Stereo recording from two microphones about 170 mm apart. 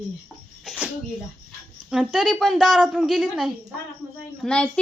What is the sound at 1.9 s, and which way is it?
A woman's voice, 5° right (ahead or behind).